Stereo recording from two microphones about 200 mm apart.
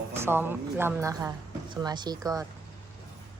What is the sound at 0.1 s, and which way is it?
Speech, 10° right (ahead or behind).